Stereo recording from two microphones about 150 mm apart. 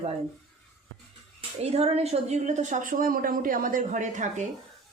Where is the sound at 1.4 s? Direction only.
45° right (ahead or behind).